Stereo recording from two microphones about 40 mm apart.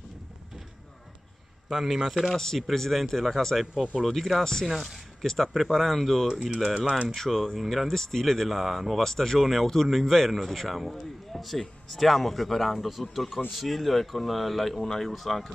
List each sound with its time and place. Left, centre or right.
1.7 s a man's voice: centre
2.3 s speech: centre
6.9 s speech: right
7.2 s speech: centre
7.9 s speech: centre
9.0 s speech: centre